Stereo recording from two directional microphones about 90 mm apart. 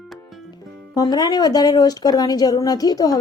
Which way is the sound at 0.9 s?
45° left (ahead or behind).